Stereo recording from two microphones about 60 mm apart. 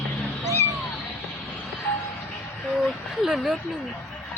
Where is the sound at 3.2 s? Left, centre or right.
Centre.